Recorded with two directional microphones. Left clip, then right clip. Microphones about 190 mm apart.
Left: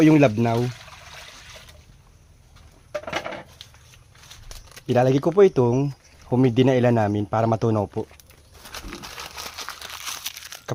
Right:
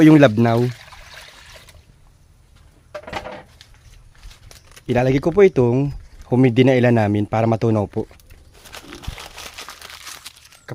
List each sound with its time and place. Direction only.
0.0 s speech: 55° right (ahead or behind)
4.9 s a man's voice: 30° right (ahead or behind)
8.6 s crumpling: 5° right (ahead or behind)
10.2 s a sound: 35° left (ahead or behind)